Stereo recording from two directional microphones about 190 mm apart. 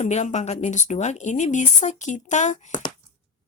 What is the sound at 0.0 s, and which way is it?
Speech, 35° left (ahead or behind).